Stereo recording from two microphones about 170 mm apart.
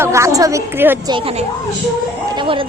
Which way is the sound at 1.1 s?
35° right (ahead or behind).